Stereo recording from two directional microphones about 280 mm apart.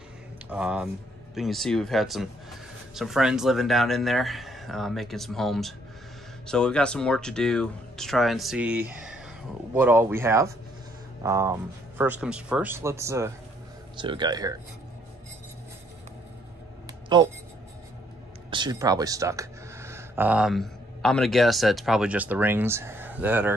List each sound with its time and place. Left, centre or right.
0.5 s speech: centre
16.8 s a sound: centre
18.5 s speech: centre